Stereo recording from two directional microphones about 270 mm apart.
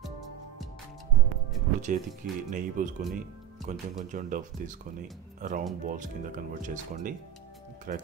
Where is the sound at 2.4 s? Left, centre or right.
Right.